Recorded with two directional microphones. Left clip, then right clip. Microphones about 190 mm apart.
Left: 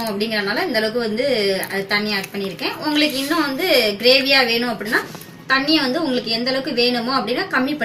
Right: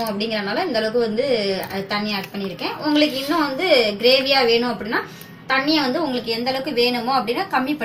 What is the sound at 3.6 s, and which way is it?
Speech, 45° right (ahead or behind).